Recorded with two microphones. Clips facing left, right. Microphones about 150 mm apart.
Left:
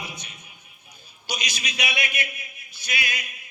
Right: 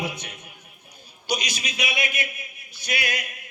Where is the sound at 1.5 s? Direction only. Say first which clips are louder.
Right 1 dB; 50° right (ahead or behind).